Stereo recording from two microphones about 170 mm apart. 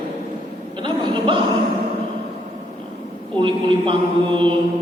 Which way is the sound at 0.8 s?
30° right (ahead or behind).